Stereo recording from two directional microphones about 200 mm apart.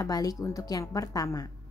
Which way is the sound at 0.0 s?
20° left (ahead or behind).